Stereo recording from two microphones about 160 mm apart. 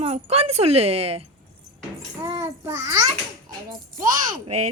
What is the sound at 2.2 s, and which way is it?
A child's voice, 20° right (ahead or behind).